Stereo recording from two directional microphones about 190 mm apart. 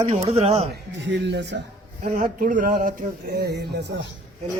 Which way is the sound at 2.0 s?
45° right (ahead or behind).